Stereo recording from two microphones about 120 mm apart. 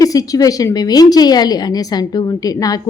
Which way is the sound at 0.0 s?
30° left (ahead or behind).